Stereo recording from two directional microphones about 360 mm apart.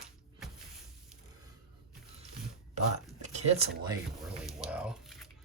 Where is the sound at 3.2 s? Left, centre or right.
Centre.